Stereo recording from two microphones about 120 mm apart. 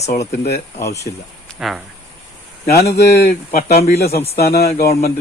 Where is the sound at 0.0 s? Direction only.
65° left (ahead or behind).